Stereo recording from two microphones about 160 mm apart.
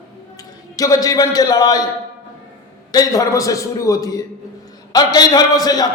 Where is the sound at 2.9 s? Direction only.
20° left (ahead or behind).